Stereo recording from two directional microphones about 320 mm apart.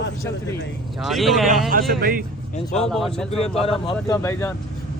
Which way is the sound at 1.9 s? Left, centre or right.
Right.